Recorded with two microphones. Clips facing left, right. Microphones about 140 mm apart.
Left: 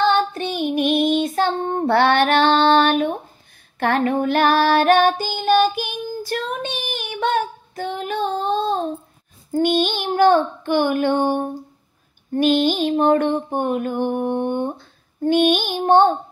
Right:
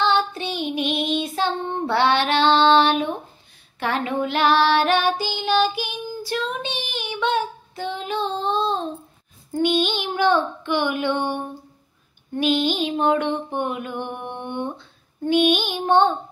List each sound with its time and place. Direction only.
0.1 s child singing: 45° left (ahead or behind)
9.5 s mantra: 45° left (ahead or behind)